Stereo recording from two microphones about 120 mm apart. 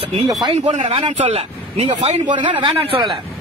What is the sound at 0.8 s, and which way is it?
Speech, 60° right (ahead or behind).